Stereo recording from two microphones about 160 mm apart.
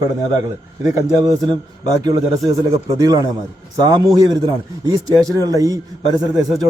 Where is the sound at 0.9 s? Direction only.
20° right (ahead or behind).